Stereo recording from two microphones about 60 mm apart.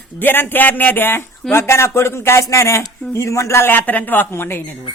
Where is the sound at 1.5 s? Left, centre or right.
Left.